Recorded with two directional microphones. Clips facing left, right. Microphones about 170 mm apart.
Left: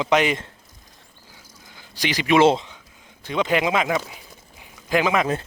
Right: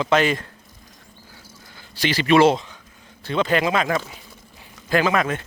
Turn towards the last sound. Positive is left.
turn(degrees=15)  # may be behind; listen again after turning